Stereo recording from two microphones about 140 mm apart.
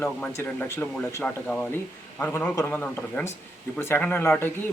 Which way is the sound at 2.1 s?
15° left (ahead or behind).